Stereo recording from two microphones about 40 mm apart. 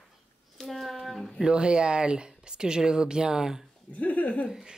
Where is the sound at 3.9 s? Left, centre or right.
Left.